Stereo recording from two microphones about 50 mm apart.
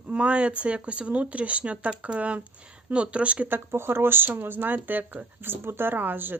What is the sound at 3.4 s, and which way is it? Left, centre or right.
Speech, right.